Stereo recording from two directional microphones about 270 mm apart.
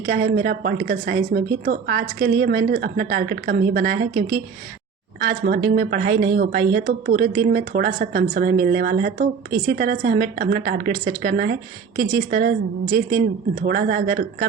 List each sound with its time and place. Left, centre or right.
0.1 s a woman's voice: right